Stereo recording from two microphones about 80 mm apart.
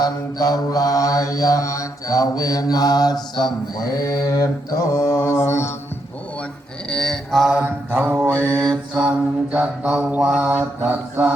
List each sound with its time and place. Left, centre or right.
0.0 s mantra: left
4.0 s mantra: left
6.9 s mantra: centre
7.6 s mantra: right
8.3 s mantra: centre
9.0 s mantra: centre
10.4 s mantra: right